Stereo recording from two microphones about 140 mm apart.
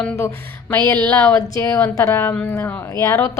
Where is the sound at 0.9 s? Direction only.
15° left (ahead or behind).